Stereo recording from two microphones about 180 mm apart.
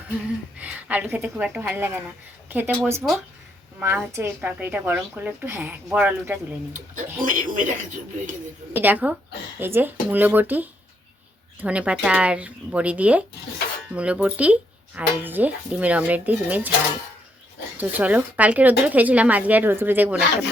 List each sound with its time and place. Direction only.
0.6 s speech: 10° right (ahead or behind)
6.7 s speech: 45° right (ahead or behind)
8.7 s speech: 10° right (ahead or behind)
17.7 s speech: 10° right (ahead or behind)